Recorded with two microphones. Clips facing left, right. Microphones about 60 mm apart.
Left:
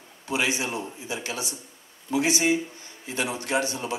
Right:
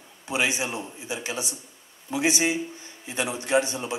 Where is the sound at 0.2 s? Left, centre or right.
Right.